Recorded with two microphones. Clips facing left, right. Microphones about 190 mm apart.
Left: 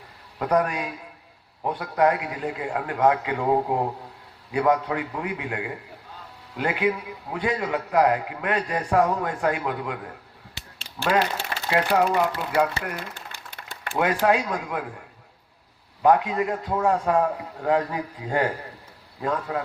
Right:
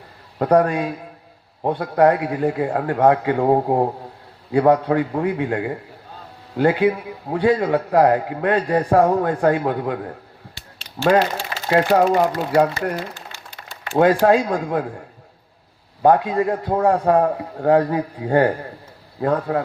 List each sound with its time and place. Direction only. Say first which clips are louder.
0.3 s a man's voice: right 7 dB; 35° right (ahead or behind)
13.1 s a sound: right 2 dB; 55° left (ahead or behind)
13.9 s a man's voice: right 7 dB; 35° right (ahead or behind)
16.0 s a man's voice: right 4 dB; 35° right (ahead or behind)